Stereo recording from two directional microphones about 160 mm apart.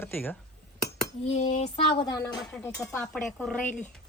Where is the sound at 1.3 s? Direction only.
45° left (ahead or behind).